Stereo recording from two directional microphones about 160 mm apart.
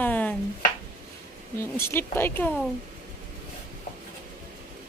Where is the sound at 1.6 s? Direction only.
15° left (ahead or behind).